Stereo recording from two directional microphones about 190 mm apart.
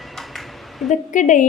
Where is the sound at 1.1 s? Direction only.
40° left (ahead or behind).